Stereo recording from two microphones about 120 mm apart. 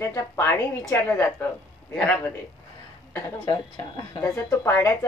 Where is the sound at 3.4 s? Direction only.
35° left (ahead or behind).